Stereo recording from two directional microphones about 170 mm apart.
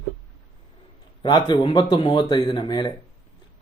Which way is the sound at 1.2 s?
25° left (ahead or behind).